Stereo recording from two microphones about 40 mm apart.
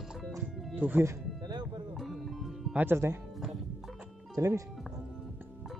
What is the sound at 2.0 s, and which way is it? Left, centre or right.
Music, centre.